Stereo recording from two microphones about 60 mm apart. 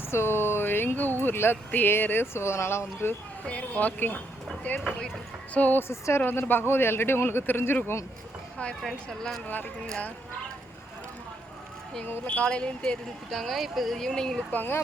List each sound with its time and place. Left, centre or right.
0.1 s a sound: left
1.2 s a man's voice: left
2.2 s speech: left
3.4 s speech: left
5.9 s speech: left
6.2 s a man's voice: left
8.8 s speech: centre
12.0 s a man's voice: left
12.4 s speech: centre
13.3 s speech: centre
14.5 s a man's voice: left